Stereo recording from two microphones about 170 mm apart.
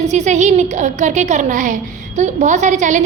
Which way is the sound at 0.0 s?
40° right (ahead or behind).